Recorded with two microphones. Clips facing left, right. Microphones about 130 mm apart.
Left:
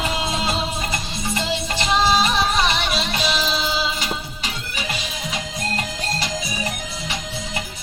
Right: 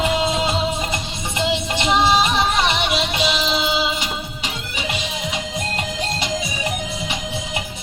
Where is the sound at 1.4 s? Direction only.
20° right (ahead or behind).